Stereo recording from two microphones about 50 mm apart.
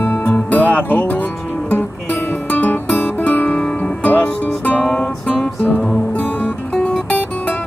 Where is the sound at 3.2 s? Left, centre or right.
Left.